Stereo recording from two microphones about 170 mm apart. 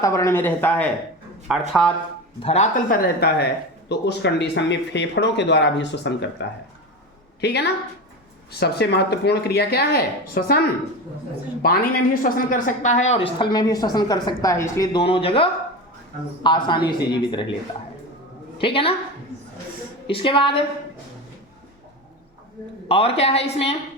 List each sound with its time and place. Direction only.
0.0 s speech: 20° left (ahead or behind); by 1.9 s 5° left (ahead or behind)
2.4 s a woman's voice: 35° left (ahead or behind)
2.9 s speech: 70° left (ahead or behind)
3.8 s speech: 85° left
7.4 s speech: 75° left (ahead or behind)
11.6 s a woman's voice: 60° left (ahead or behind); by 14.8 s 20° left (ahead or behind)
14.9 s a woman's voice: 30° left (ahead or behind)
18.5 s a woman's voice: 30° left (ahead or behind)
20.1 s a woman's voice: 30° left (ahead or behind)
22.9 s a woman's voice: 35° left (ahead or behind)